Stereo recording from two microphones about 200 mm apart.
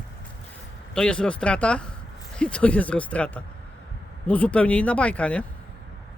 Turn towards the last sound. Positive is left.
turn(degrees=5)  # may be behind; listen again after turning